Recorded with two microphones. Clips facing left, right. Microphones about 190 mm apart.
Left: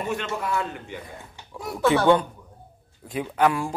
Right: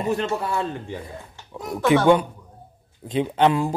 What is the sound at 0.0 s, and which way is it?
A man's voice, 35° right (ahead or behind).